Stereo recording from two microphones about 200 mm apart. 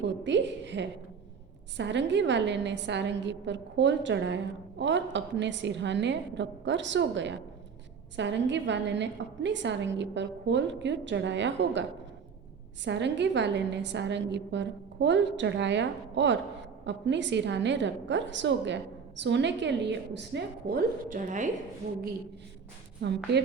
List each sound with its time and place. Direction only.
0.0 s a sound: 65° right (ahead or behind)
1.7 s a woman's voice: 60° right (ahead or behind); by 21.5 s 40° right (ahead or behind)
23.0 s a woman's voice: 55° right (ahead or behind)